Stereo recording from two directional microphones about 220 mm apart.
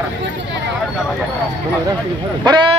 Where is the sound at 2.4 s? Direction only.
20° right (ahead or behind).